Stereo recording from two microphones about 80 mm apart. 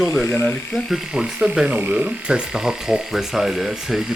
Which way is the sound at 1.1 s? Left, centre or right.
Centre.